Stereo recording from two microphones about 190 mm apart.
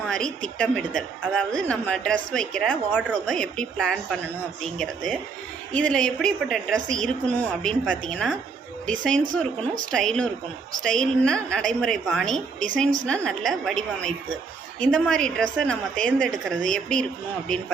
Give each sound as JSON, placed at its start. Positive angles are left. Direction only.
{"t": 0.0, "sound": "a woman's voice", "side_deg": 5}
{"t": 5.7, "sound": "a woman's voice", "side_deg": 5}
{"t": 9.2, "sound": "speech", "side_deg": -45}
{"t": 9.9, "sound": "a woman's voice", "side_deg": 5}